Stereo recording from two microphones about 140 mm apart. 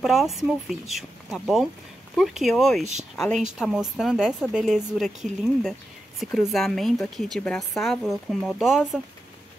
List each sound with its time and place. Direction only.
0.0 s a woman's voice: centre (ahead or behind)
2.8 s speech: 55° right (ahead or behind)
3.2 s a woman's voice: centre (ahead or behind)